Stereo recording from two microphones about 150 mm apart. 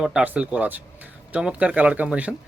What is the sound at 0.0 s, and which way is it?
Speech, 5° right (ahead or behind).